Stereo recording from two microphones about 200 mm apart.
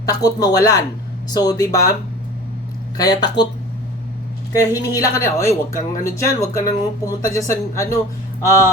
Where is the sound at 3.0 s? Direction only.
20° left (ahead or behind).